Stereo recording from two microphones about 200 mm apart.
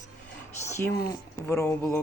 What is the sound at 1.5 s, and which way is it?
Speech, 15° left (ahead or behind).